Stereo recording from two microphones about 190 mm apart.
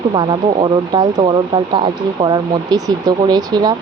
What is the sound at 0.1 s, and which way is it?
Speech, 25° right (ahead or behind).